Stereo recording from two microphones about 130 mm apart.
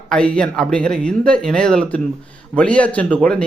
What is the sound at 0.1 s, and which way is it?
Speech, 5° left (ahead or behind).